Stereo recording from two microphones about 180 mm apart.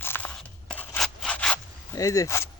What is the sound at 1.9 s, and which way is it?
Speech, 20° left (ahead or behind).